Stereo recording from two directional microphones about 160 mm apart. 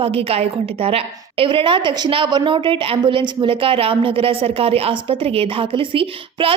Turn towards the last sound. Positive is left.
turn(degrees=-35)  # may be behind; listen again after turning